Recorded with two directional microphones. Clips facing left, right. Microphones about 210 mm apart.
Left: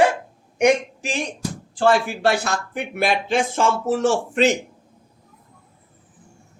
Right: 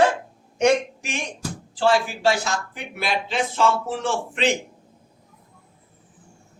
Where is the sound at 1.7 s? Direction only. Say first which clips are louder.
Left 2 dB; 55° left (ahead or behind).